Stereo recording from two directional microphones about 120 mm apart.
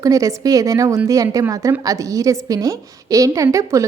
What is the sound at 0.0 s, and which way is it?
A woman's voice, 30° right (ahead or behind).